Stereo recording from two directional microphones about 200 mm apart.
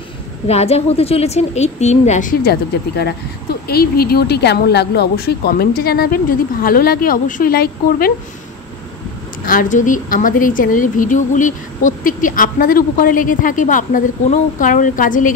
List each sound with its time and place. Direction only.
0.5 s a woman's voice: 30° left (ahead or behind)
3.6 s speech: 50° left (ahead or behind)
9.5 s a woman's voice: 40° left (ahead or behind)